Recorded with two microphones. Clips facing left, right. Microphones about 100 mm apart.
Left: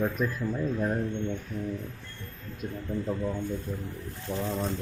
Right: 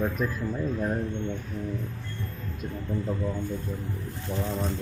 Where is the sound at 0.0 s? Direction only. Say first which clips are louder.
Even; centre (ahead or behind).